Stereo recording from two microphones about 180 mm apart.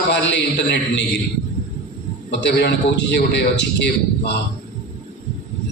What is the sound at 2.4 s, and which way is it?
A man's voice, 75° left (ahead or behind).